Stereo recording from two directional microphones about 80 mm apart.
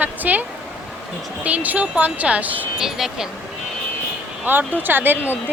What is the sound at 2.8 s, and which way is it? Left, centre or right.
Speech, centre.